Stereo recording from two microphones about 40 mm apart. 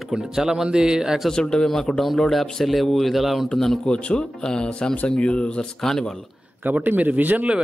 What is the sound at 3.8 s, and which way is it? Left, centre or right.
Speech, left.